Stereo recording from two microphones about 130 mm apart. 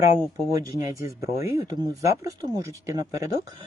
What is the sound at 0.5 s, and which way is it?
Speech, 25° right (ahead or behind).